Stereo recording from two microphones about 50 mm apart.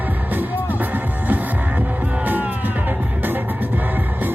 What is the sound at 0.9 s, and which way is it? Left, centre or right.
Music, right.